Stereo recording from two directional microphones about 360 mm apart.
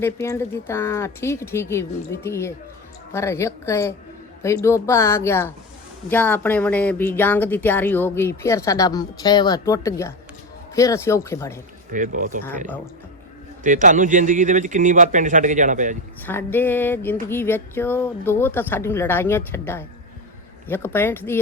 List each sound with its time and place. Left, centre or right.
0.0 s speech: centre
11.9 s a man's voice: right
12.5 s speech: centre
13.7 s a man's voice: right
16.2 s speech: centre